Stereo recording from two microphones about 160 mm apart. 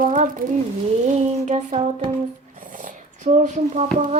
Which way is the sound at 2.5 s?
55° right (ahead or behind).